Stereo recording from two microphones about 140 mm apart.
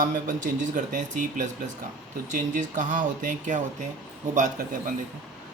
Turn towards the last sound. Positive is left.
turn(degrees=-70)  # may be behind; listen again after turning